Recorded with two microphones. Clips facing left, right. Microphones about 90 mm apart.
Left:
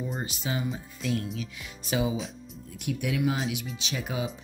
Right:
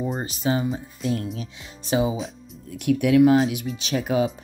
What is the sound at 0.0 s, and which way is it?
Speech, 40° right (ahead or behind).